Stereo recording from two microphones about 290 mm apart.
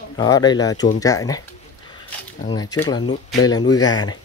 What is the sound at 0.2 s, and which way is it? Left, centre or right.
Speech, centre.